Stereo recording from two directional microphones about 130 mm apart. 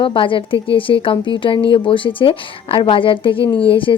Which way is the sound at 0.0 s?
40° left (ahead or behind).